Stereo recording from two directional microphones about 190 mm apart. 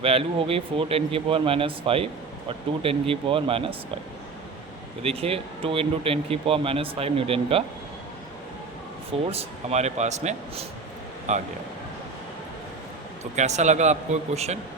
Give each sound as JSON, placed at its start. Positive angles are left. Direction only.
{"t": 0.0, "sound": "speech", "side_deg": -30}
{"t": 5.0, "sound": "speech", "side_deg": -30}
{"t": 9.2, "sound": "speech", "side_deg": -30}
{"t": 13.3, "sound": "speech", "side_deg": -35}